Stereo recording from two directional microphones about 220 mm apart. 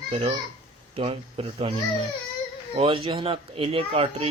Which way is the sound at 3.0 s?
25° right (ahead or behind).